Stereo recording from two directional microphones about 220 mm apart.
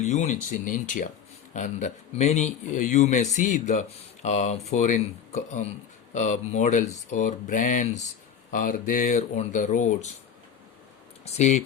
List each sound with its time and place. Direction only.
0.0 s speech: 35° left (ahead or behind)
11.3 s speech: 30° left (ahead or behind)